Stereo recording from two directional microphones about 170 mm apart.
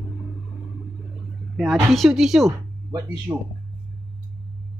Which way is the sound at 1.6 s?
Centre (ahead or behind).